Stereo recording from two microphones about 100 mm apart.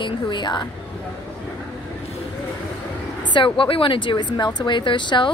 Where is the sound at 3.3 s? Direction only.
60° left (ahead or behind).